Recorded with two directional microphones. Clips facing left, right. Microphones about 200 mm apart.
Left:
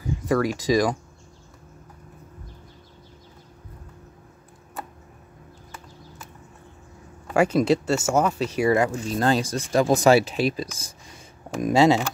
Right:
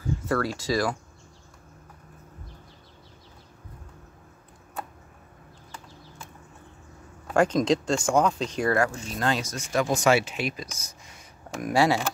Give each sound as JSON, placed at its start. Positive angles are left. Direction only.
{"t": 0.0, "sound": "speech", "side_deg": 15}
{"t": 7.3, "sound": "speech", "side_deg": 10}
{"t": 9.1, "sound": "speech", "side_deg": 35}
{"t": 11.6, "sound": "speech", "side_deg": 20}